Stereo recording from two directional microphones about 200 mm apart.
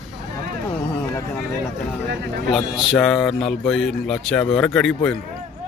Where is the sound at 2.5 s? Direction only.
Centre (ahead or behind).